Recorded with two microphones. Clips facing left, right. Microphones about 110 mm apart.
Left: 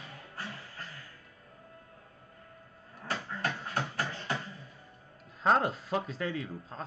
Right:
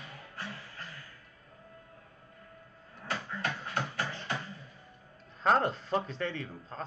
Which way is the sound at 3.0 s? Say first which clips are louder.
Left 1 dB; 40° left (ahead or behind).